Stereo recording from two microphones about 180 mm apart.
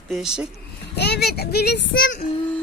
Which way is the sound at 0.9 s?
65° left (ahead or behind).